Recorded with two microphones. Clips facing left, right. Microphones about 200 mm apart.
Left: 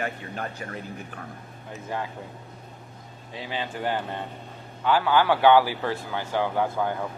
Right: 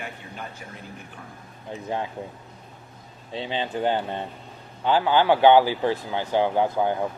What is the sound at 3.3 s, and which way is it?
A man's voice, 25° right (ahead or behind).